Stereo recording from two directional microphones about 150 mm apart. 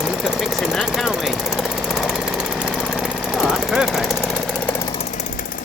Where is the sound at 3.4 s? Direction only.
5° right (ahead or behind).